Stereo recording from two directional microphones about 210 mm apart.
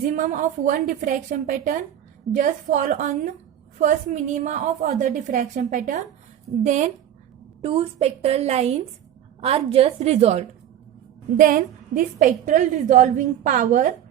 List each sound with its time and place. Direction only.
0.1 s a woman's voice: 35° right (ahead or behind)
11.3 s a woman's voice: 40° right (ahead or behind)